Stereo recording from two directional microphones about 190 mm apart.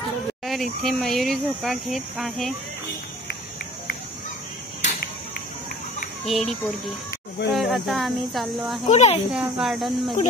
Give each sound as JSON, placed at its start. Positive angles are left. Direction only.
{"t": 0.5, "sound": "speech", "side_deg": 0}
{"t": 6.2, "sound": "speech", "side_deg": 0}
{"t": 7.5, "sound": "speech", "side_deg": 0}
{"t": 8.8, "sound": "speech", "side_deg": 35}
{"t": 9.3, "sound": "speech", "side_deg": 0}